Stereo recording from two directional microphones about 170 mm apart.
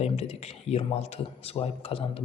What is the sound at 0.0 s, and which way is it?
A man's voice, 40° left (ahead or behind).